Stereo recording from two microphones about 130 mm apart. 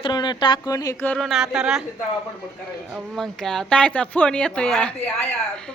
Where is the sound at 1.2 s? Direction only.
Centre (ahead or behind).